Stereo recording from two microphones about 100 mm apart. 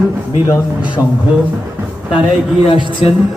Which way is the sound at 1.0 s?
30° left (ahead or behind).